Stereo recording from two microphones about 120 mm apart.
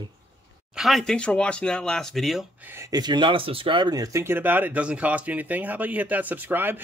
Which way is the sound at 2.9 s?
35° right (ahead or behind).